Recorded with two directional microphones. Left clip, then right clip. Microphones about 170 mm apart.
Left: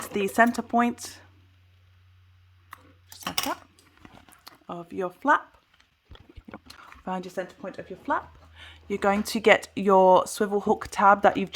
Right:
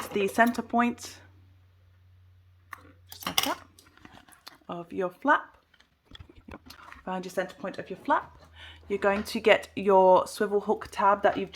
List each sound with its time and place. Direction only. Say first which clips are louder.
0.0 s speech: left 2 dB; 20° left (ahead or behind)
3.1 s a sound: right 1 dB; 15° left (ahead or behind)
7.3 s speech: right 2 dB; 15° left (ahead or behind)
8.5 s speech: even; 25° left (ahead or behind); by 11.5 s 55° left (ahead or behind)